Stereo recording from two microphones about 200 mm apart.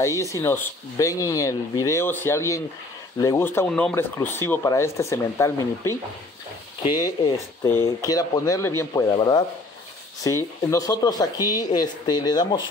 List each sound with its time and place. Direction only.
0.2 s speech: 15° left (ahead or behind)